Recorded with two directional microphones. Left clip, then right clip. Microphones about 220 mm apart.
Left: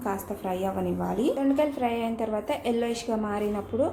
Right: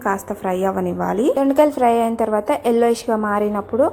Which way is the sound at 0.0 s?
30° right (ahead or behind).